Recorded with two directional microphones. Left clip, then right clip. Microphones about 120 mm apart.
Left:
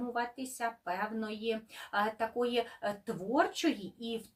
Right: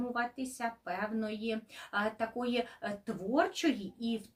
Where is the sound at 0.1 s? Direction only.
20° right (ahead or behind).